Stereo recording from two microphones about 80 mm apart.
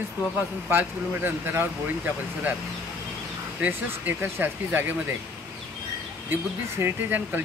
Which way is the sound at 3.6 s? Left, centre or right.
Right.